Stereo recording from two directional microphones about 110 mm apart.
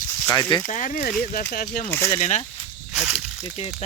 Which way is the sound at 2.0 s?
80° left.